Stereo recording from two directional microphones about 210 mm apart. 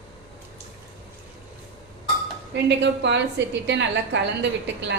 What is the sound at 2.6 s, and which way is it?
A woman's voice, 55° right (ahead or behind).